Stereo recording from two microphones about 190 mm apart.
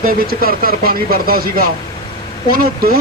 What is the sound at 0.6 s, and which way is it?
A man's voice, 50° right (ahead or behind).